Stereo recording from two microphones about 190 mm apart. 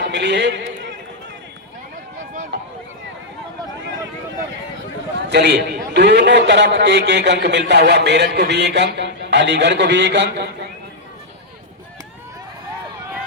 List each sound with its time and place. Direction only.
0.1 s a man's voice: 65° right (ahead or behind)
5.3 s a man's voice: 65° right (ahead or behind)